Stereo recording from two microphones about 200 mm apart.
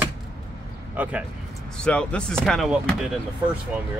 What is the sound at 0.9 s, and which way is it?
Speech, 5° right (ahead or behind).